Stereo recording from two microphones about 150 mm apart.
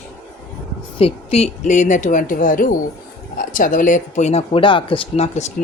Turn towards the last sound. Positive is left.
turn(degrees=35)  # may be behind; listen again after turning